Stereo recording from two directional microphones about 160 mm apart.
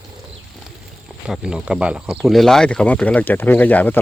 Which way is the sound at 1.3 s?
5° right (ahead or behind).